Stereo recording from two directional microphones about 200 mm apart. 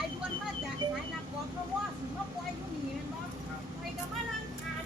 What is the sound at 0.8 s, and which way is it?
Vehicle, 20° right (ahead or behind).